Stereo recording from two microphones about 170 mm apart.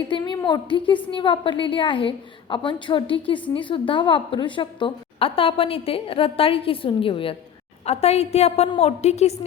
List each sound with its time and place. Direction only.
0.1 s a woman's voice: 25° left (ahead or behind)